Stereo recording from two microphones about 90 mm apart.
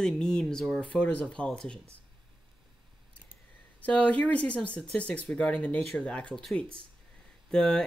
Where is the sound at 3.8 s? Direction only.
15° left (ahead or behind).